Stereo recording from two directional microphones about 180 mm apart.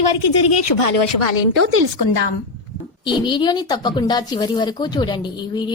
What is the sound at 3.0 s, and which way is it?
A woman's voice, 25° left (ahead or behind).